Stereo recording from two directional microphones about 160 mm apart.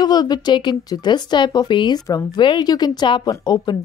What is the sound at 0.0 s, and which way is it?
A woman's voice, 25° left (ahead or behind).